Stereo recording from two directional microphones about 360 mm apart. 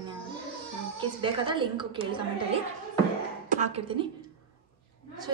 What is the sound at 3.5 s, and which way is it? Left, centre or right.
Speech, centre.